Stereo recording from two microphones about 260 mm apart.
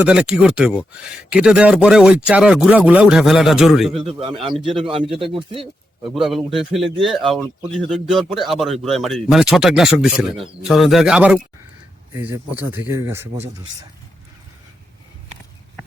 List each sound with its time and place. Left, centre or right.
0.0 s speech: centre
4.8 s speech: centre
6.1 s speech: centre